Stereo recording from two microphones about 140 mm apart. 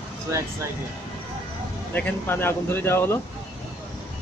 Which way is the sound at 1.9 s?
10° left (ahead or behind).